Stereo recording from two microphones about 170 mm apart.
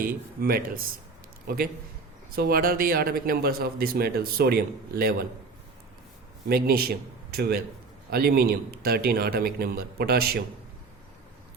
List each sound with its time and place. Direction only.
0.0 s a man's voice: 60° right (ahead or behind)
6.5 s a man's voice: 65° right (ahead or behind)